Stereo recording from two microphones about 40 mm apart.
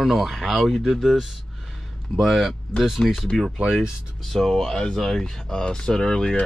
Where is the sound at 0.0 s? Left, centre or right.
Centre.